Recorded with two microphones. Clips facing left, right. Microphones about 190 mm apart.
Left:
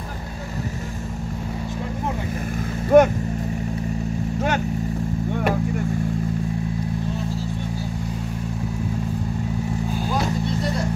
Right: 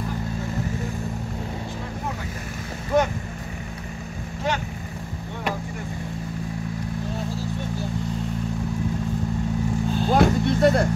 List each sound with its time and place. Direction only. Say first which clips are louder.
2.9 s vehicle: left 8 dB; 55° left (ahead or behind)
10.1 s vehicle: right 7 dB; 60° right (ahead or behind)